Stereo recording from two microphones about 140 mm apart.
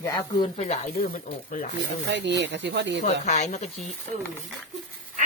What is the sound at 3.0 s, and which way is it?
Speech, 55° left (ahead or behind).